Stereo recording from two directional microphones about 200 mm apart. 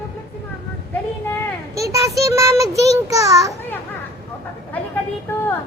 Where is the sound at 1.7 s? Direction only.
15° right (ahead or behind).